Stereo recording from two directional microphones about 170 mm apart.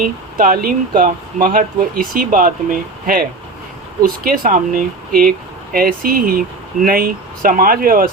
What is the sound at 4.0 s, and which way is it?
Speech, 55° right (ahead or behind).